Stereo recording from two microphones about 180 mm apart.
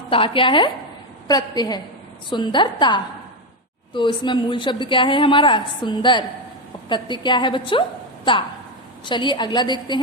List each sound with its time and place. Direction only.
0.1 s a woman's voice: 30° left (ahead or behind)